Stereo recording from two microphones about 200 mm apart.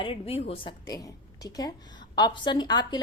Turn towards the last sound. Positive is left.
turn(degrees=20)  # may be behind; listen again after turning